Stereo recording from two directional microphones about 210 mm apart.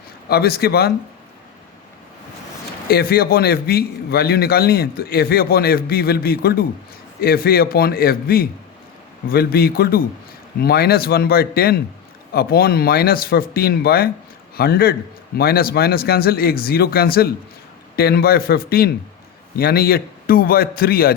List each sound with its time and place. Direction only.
0.3 s a man's voice: 50° left (ahead or behind)
2.9 s a man's voice: 45° left (ahead or behind)